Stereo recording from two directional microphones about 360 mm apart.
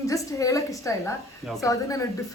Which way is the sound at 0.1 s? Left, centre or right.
Centre.